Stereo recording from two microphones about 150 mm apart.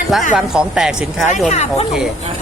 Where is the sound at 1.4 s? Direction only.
50° left (ahead or behind).